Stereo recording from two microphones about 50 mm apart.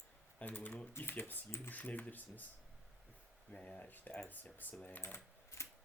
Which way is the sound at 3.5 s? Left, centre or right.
Left.